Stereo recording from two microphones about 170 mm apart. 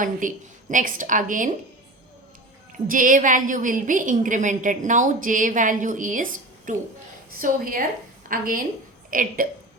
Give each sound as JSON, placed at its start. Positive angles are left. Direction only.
{"t": 0.0, "sound": "a woman's voice", "side_deg": -50}
{"t": 2.8, "sound": "a woman's voice", "side_deg": -55}